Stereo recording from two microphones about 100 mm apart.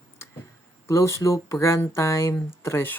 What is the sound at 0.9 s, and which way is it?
Speech, 30° left (ahead or behind).